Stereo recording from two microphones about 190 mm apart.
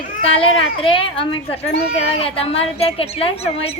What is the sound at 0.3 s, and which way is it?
A woman's voice, 30° left (ahead or behind).